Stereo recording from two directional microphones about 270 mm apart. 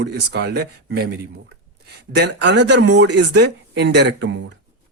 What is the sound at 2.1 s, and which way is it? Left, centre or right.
Speech, right.